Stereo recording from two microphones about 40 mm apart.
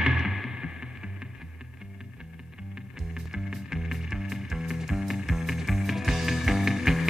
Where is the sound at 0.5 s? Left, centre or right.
Centre.